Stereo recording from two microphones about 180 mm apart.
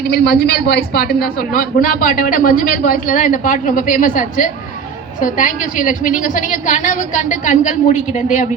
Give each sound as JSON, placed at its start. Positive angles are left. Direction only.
{"t": 0.1, "sound": "a man's voice", "side_deg": 60}